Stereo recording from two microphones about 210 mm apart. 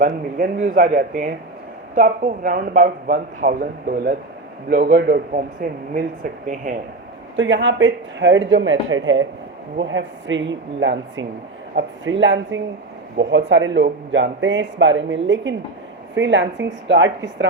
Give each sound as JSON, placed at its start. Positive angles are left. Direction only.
{"t": 0.0, "sound": "a man's voice", "side_deg": -40}
{"t": 7.3, "sound": "speech", "side_deg": -60}